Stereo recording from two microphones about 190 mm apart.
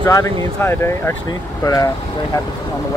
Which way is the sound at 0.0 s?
15° left (ahead or behind).